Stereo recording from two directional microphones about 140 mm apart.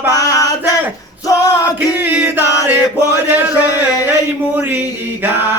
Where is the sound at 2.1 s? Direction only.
15° right (ahead or behind).